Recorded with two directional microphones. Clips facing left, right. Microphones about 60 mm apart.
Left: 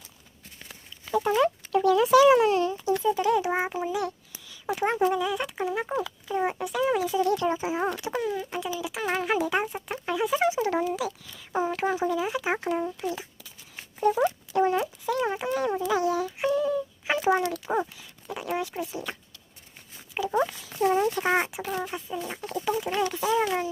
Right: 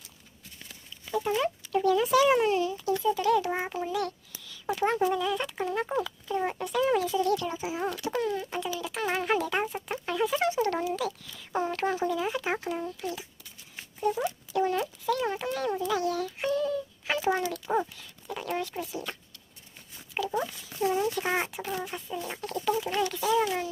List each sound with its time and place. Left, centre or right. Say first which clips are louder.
1.2 s rodents: left 5 dB; left
1.7 s a sound: left 4 dB; left
3.0 s a child's voice: even; centre
5.0 s speech: left 2 dB; centre; by 8.1 s left
8.2 s a child's voice: left 1 dB; centre
12.7 s speech: left 4 dB; left
14.0 s speech: left 5 dB; left
14.5 s speech: left 2 dB; left
14.8 s speech: left 2 dB; centre
20.2 s a child's voice: left 2 dB; centre
20.8 s speech: left 4 dB; left
21.4 s speech: left 2 dB; centre; by 23.5 s left